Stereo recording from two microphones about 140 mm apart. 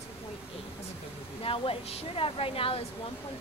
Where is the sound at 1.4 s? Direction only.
40° left (ahead or behind).